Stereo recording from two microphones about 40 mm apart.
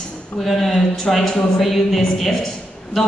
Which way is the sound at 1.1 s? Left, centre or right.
Centre.